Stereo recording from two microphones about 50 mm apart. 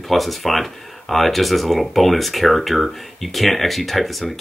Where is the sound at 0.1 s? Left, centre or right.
Centre.